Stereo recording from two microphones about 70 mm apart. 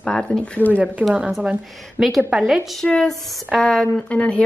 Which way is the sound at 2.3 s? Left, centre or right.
Centre.